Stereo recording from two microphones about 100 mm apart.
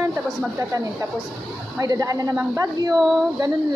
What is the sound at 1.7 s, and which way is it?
A woman's voice, 35° right (ahead or behind).